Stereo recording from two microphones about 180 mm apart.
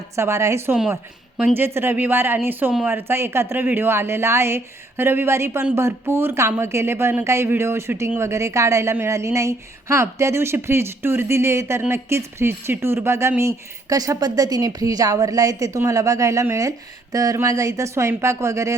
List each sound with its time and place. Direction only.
0.2 s a woman's voice: 15° right (ahead or behind)